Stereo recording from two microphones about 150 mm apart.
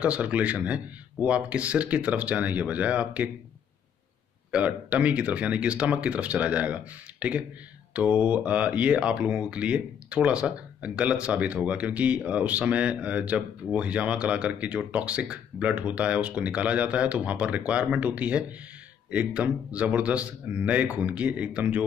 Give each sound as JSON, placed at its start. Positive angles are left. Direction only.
{"t": 0.0, "sound": "speech", "side_deg": -10}
{"t": 4.5, "sound": "speech", "side_deg": -10}